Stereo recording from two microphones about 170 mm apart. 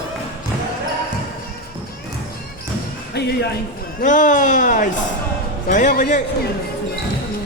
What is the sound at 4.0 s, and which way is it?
A man's voice, 50° left (ahead or behind).